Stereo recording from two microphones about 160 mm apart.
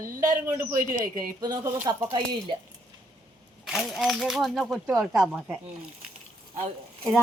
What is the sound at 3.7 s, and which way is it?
Speech, centre (ahead or behind).